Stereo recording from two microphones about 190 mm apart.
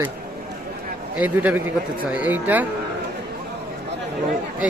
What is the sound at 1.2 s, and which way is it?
Speech, 10° right (ahead or behind).